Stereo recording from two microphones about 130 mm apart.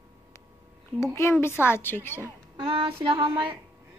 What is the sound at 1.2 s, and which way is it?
A woman's voice, 20° left (ahead or behind).